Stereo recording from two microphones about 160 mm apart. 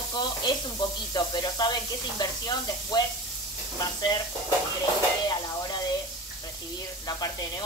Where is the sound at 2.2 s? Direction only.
25° left (ahead or behind).